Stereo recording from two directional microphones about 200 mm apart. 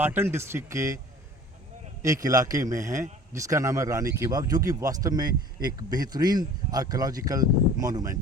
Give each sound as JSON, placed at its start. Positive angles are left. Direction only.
{"t": 0.0, "sound": "a man's voice", "side_deg": -10}
{"t": 2.0, "sound": "a man's voice", "side_deg": -15}